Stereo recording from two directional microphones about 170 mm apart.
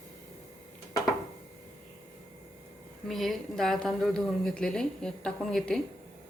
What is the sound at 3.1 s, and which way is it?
Speech, centre (ahead or behind).